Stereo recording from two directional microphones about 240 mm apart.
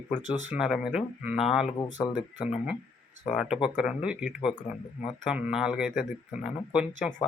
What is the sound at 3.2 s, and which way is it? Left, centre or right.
Speech, centre.